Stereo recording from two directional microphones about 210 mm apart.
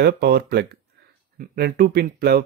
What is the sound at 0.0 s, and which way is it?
Speech, 50° right (ahead or behind).